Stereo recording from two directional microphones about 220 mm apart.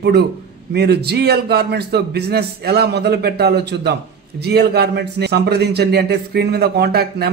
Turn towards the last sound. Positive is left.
turn(degrees=-45)  # may be behind; listen again after turning